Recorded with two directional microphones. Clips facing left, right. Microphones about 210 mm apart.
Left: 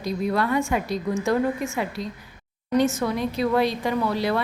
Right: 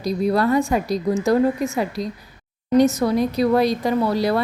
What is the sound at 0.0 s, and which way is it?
A woman's voice, 35° right (ahead or behind).